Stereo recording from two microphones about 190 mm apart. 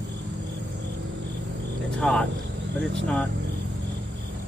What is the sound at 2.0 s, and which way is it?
Speech, 5° left (ahead or behind).